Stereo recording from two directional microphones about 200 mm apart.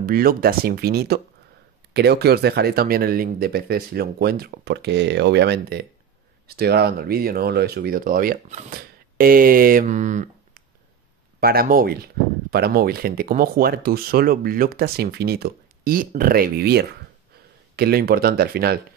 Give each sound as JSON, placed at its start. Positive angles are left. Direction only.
{"t": 0.0, "sound": "speech", "side_deg": -45}
{"t": 11.3, "sound": "speech", "side_deg": -50}